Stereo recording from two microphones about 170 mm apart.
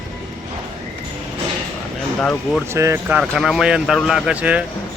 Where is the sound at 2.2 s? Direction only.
5° left (ahead or behind).